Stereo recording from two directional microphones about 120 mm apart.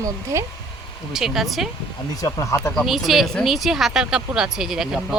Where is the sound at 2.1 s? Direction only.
30° left (ahead or behind).